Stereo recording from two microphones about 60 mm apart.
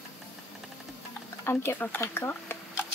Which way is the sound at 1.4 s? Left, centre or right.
Left.